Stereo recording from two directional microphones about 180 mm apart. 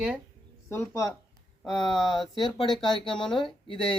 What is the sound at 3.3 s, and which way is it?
Speech, 30° left (ahead or behind).